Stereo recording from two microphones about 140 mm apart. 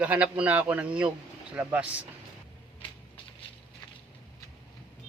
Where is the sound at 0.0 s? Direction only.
10° right (ahead or behind).